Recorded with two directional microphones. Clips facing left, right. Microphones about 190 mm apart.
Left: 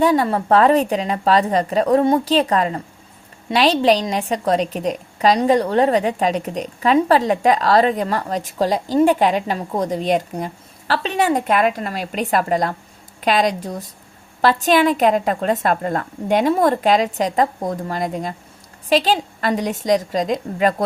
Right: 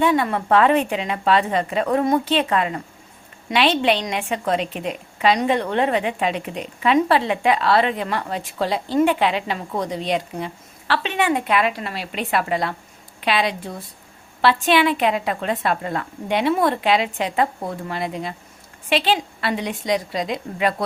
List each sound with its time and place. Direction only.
0.0 s a woman's voice: 35° left (ahead or behind)